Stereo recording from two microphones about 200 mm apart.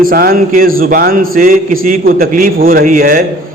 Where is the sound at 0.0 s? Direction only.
45° right (ahead or behind).